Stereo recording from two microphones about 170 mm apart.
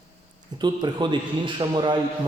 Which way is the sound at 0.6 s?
25° right (ahead or behind).